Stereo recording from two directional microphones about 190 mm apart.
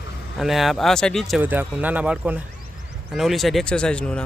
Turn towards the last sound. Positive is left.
turn(degrees=5)  # may be behind; listen again after turning